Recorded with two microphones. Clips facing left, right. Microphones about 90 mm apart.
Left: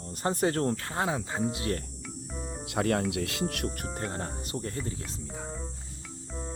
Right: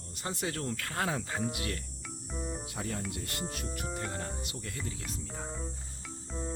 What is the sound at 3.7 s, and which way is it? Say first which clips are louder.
Speech: left 2 dB; 45° left (ahead or behind).